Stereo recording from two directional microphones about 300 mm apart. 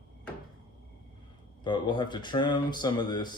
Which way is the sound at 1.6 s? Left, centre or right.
Centre.